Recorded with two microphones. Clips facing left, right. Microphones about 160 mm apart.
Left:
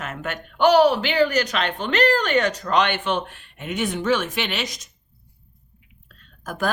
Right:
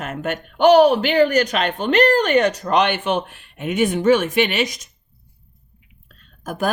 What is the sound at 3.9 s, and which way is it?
Speech, 50° right (ahead or behind).